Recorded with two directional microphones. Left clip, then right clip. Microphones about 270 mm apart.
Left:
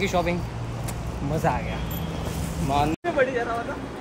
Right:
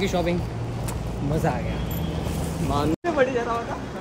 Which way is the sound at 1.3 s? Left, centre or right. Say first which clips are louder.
Left 1 dB; centre.